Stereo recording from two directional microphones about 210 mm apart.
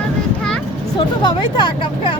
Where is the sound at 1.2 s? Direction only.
20° left (ahead or behind).